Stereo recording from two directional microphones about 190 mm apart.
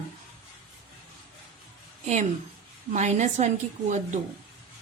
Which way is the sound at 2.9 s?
40° right (ahead or behind).